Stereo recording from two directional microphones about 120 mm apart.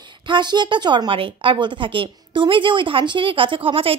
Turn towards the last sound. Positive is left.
turn(degrees=-50)  # may be behind; listen again after turning